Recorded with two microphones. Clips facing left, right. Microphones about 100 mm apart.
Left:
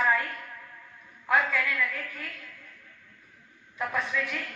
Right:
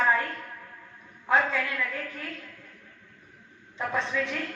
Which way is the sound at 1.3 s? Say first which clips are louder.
Right 1 dB; 25° right (ahead or behind).